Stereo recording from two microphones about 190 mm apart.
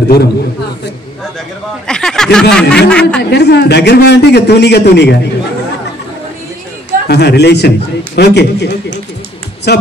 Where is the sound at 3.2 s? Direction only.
60° left (ahead or behind).